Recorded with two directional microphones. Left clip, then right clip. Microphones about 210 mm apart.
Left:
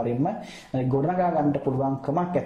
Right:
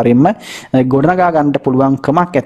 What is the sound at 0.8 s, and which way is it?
Speech, 40° right (ahead or behind).